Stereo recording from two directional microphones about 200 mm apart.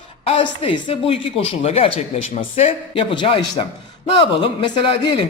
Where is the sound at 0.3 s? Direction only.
30° left (ahead or behind).